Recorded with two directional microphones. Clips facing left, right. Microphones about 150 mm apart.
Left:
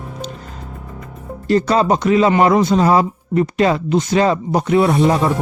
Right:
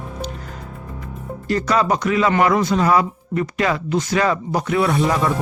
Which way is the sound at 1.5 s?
30° left (ahead or behind).